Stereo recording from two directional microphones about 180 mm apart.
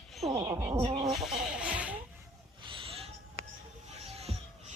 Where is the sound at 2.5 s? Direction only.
30° right (ahead or behind).